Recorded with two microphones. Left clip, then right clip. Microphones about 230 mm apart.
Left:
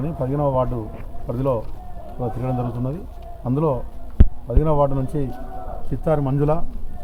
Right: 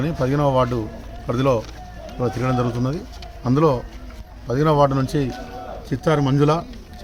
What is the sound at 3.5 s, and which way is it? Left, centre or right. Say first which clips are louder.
Speech: right 4 dB; right.